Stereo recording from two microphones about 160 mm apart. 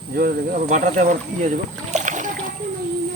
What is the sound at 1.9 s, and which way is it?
Boat, 50° right (ahead or behind).